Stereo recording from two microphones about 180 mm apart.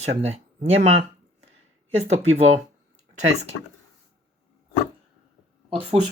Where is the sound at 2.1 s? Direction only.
40° right (ahead or behind).